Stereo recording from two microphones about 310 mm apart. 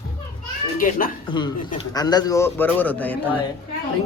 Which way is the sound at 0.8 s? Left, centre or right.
Left.